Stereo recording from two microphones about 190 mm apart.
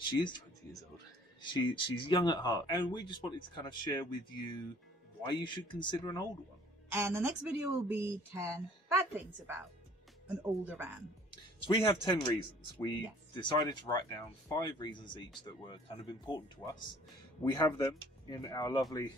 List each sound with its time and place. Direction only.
0.0 s speech: 25° left (ahead or behind)
1.4 s speech: 25° left (ahead or behind)
6.9 s a woman's voice: 10° right (ahead or behind)
10.6 s a woman's voice: 10° right (ahead or behind)
11.6 s speech: 25° left (ahead or behind)
13.3 s speech: 25° left (ahead or behind)